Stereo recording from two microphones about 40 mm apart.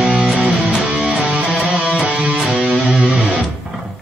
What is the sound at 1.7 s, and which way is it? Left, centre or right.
Music, right.